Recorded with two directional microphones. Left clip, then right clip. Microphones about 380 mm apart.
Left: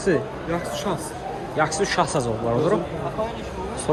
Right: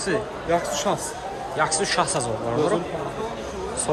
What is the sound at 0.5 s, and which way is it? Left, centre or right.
Speech, right.